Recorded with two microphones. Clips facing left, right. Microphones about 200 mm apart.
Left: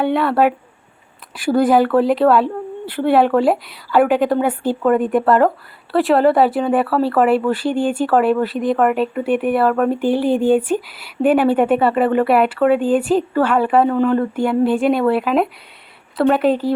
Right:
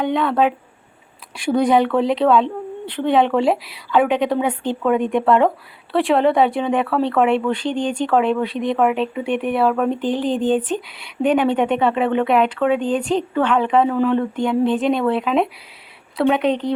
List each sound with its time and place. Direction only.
0.0 s speech: 5° left (ahead or behind)